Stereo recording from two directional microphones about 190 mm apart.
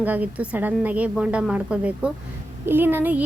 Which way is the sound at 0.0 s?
10° right (ahead or behind).